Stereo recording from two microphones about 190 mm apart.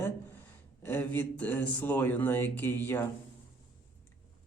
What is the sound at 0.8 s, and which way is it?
Speech, 10° left (ahead or behind).